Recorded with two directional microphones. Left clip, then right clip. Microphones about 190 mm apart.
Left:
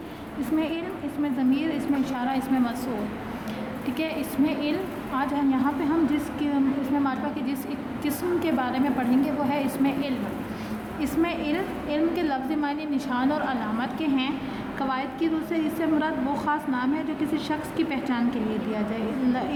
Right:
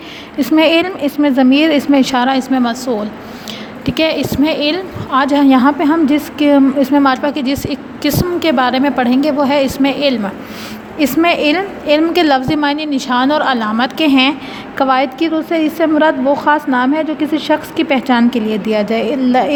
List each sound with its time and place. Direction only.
0.5 s a woman's voice: 50° right (ahead or behind)